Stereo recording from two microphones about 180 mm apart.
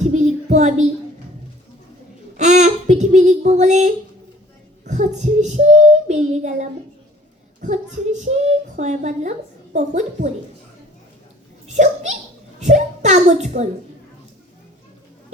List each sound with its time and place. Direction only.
0.0 s child singing: 40° right (ahead or behind)
2.4 s a sound: 40° right (ahead or behind)
3.0 s child singing: 40° right (ahead or behind)
6.3 s a child's voice: 40° right (ahead or behind)
11.7 s a child's voice: 40° right (ahead or behind)
12.5 s a sound: 40° right (ahead or behind)